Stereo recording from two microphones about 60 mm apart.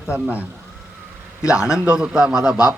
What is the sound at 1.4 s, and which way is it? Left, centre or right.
Speech, left.